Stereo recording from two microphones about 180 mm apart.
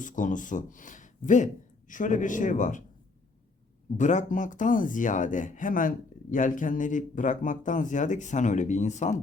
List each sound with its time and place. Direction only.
0.0 s speech: 45° left (ahead or behind)
3.9 s speech: 45° left (ahead or behind)